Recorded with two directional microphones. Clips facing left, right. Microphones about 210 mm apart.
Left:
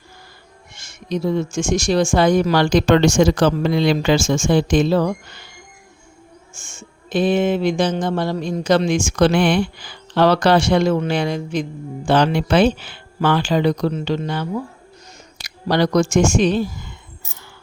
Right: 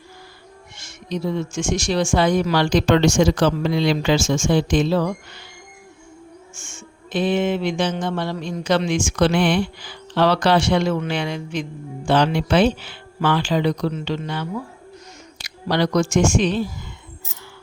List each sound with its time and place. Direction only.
0.8 s speech: 45° left (ahead or behind)
6.5 s music: 40° left (ahead or behind)
12.0 s speech: 50° left (ahead or behind)
15.4 s music: 45° left (ahead or behind)